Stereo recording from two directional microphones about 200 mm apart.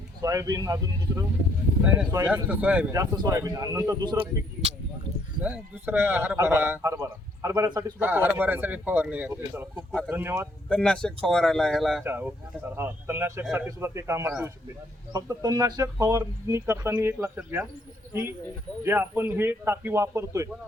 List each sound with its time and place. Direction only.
0.2 s a man's voice: 15° right (ahead or behind)
5.4 s a man's voice: 10° right (ahead or behind)
10.7 s speech: 5° left (ahead or behind)
12.0 s a man's voice: 10° right (ahead or behind)
18.8 s a man's voice: 10° right (ahead or behind)